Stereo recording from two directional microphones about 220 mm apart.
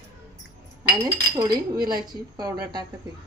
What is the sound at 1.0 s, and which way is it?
A woman's voice, 15° right (ahead or behind).